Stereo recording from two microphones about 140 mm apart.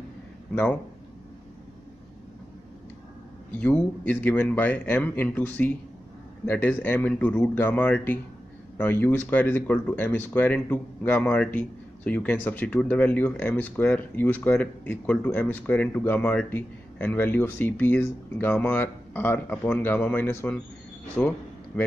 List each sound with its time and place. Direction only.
3.5 s speech: 10° left (ahead or behind)